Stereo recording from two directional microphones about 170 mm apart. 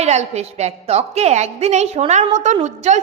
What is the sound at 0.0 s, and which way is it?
A woman's voice, 40° right (ahead or behind).